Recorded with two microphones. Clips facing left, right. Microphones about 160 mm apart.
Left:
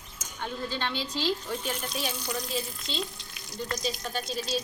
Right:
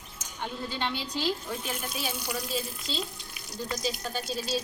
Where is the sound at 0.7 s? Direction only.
10° right (ahead or behind).